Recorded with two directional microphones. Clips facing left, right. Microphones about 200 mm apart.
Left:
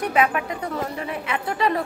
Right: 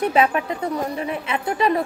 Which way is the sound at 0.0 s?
25° right (ahead or behind).